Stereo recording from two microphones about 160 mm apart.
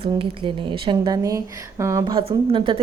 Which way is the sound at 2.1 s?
35° right (ahead or behind).